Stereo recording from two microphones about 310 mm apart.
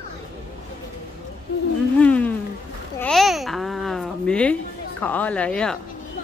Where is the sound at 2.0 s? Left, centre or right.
Centre.